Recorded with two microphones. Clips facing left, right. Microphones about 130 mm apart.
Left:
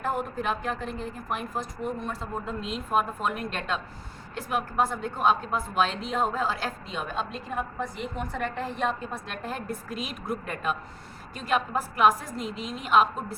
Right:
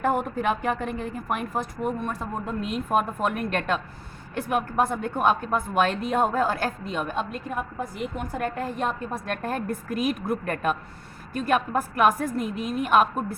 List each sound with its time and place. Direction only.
0.0 s a woman's voice: 55° right (ahead or behind)